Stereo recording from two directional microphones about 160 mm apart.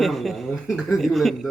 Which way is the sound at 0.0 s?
Centre (ahead or behind).